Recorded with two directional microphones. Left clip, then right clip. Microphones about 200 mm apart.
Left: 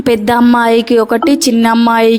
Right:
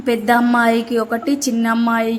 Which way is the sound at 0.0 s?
40° left (ahead or behind).